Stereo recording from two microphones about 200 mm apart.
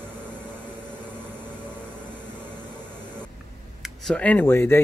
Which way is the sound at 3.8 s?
5° left (ahead or behind).